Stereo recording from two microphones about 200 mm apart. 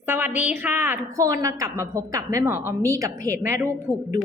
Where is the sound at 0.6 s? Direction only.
10° right (ahead or behind).